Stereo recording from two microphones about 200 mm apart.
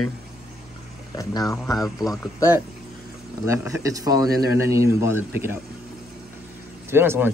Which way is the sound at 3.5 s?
15° right (ahead or behind).